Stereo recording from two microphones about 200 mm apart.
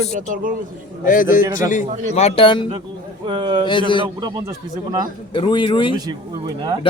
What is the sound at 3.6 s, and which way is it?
Speech, 25° left (ahead or behind).